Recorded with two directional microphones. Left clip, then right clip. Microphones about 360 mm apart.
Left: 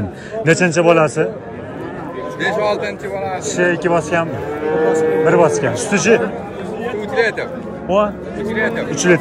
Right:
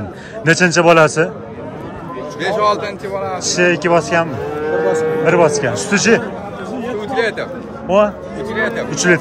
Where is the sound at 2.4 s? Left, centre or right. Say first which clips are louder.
Right 2 dB; right.